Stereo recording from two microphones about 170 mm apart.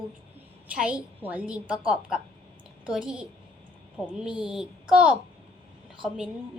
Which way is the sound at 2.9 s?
5° right (ahead or behind).